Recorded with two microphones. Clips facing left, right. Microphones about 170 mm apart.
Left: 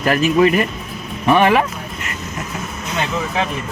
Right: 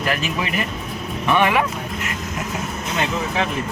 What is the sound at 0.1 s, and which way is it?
Speech, 40° left (ahead or behind).